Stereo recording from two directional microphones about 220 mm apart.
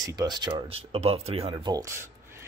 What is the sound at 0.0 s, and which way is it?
Speech, 20° right (ahead or behind).